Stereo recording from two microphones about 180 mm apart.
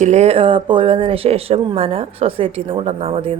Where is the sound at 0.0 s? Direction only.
40° right (ahead or behind).